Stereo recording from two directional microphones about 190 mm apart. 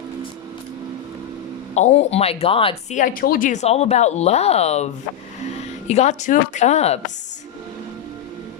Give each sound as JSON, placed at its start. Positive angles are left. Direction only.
{"t": 1.7, "sound": "speech", "side_deg": 35}
{"t": 3.0, "sound": "speech", "side_deg": 45}
{"t": 5.9, "sound": "speech", "side_deg": 35}